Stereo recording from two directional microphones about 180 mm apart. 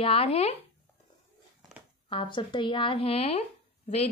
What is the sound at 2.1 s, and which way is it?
Speech, 25° left (ahead or behind).